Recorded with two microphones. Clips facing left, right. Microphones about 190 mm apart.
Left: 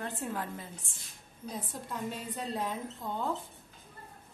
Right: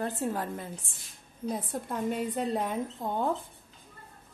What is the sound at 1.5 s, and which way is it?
A woman's voice, 55° right (ahead or behind).